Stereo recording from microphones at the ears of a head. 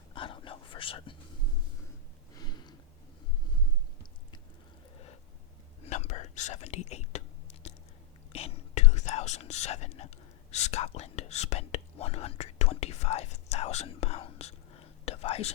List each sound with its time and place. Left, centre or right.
0.1 s whispering: left
5.8 s whispering: left